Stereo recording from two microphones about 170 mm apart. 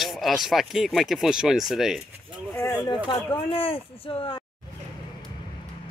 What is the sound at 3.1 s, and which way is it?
Speech, 35° left (ahead or behind).